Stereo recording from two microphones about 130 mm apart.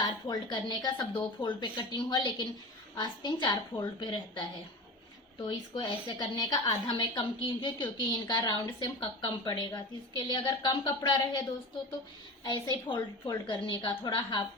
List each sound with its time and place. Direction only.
0.0 s a woman's voice: 30° left (ahead or behind)